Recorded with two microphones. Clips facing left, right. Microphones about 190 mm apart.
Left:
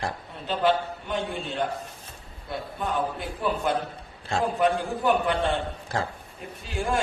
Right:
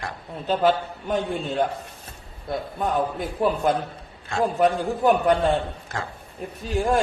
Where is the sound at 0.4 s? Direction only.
45° right (ahead or behind).